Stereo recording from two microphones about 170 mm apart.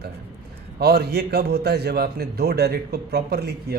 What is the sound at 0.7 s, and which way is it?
A man's voice, 70° right (ahead or behind).